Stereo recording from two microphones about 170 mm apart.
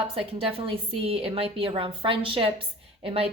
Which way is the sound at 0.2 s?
35° right (ahead or behind).